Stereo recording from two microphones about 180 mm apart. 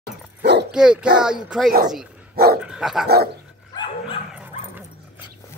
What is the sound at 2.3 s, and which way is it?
Dog, 60° right (ahead or behind).